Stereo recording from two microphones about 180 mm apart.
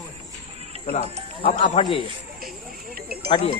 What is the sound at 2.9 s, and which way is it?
Speech, 55° right (ahead or behind).